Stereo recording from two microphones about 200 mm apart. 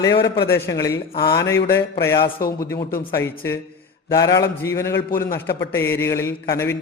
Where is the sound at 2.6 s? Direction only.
15° left (ahead or behind).